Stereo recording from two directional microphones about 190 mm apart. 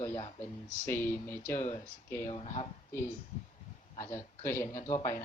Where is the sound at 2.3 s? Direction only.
30° left (ahead or behind).